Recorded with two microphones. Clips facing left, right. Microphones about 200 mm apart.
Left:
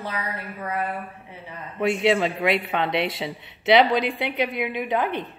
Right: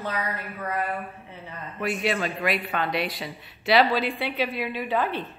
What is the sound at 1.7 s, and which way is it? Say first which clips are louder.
A man's voice: left 6 dB; 25° left (ahead or behind).